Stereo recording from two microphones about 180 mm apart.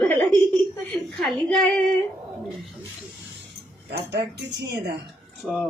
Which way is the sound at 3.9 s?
75° right (ahead or behind).